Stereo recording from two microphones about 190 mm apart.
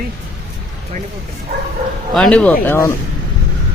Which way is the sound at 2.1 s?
5° left (ahead or behind).